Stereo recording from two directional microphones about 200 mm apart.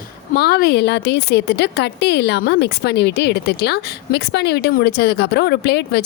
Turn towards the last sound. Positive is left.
turn(degrees=55)  # may be behind; listen again after turning